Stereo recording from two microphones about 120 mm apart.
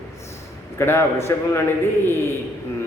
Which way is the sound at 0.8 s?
20° left (ahead or behind).